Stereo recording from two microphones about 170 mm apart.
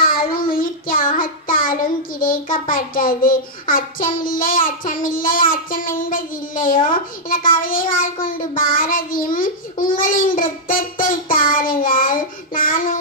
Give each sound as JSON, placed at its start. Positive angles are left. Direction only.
{"t": 0.0, "sound": "child singing", "side_deg": 60}